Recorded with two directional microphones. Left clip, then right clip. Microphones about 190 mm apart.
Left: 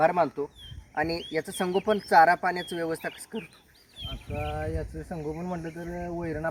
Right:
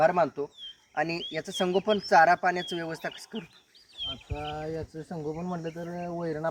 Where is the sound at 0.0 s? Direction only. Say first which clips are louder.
Even; 15° right (ahead or behind).